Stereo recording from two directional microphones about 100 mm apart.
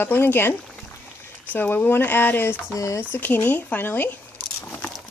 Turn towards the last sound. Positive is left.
turn(degrees=20)  # may be behind; listen again after turning